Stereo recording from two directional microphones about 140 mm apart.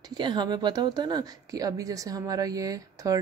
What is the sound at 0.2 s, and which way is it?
Speech, 30° right (ahead or behind).